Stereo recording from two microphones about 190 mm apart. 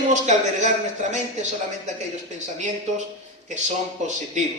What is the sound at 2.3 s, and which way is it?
A man's voice, 40° right (ahead or behind).